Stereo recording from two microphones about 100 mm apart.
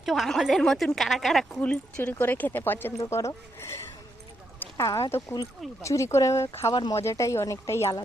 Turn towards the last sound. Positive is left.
turn(degrees=30)  # may be behind; listen again after turning